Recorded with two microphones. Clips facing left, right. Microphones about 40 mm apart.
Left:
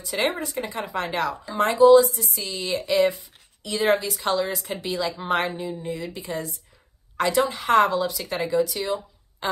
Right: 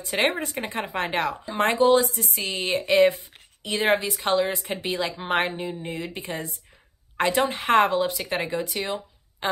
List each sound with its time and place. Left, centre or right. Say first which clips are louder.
0.0 s a woman's voice: right 1 dB; right